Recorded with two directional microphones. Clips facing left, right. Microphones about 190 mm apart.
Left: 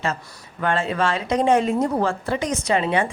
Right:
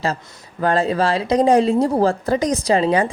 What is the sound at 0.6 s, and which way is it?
A woman's voice, 35° right (ahead or behind).